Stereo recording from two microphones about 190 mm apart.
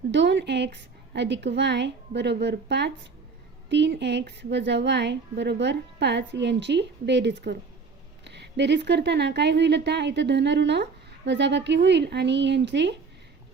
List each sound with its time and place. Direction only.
0.1 s a woman's voice: 65° right (ahead or behind)